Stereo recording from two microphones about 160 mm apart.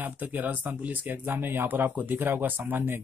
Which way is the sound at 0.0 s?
10° right (ahead or behind).